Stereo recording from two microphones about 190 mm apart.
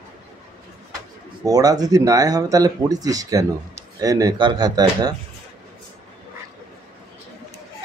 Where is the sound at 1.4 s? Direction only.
20° right (ahead or behind).